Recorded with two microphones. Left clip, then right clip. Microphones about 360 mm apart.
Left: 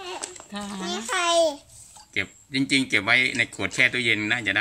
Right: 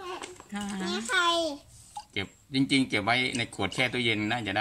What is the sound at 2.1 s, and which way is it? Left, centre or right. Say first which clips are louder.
Speech: left 6 dB; centre.